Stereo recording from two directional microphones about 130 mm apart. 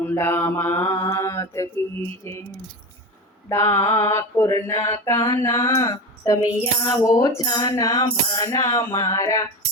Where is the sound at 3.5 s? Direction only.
20° left (ahead or behind).